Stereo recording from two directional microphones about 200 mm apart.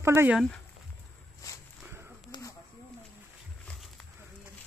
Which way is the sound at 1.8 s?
15° right (ahead or behind).